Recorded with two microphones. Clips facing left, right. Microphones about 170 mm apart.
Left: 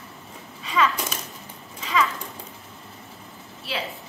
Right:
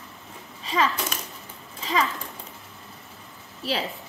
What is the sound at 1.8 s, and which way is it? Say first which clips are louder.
Horse: left 1 dB; 35° right (ahead or behind).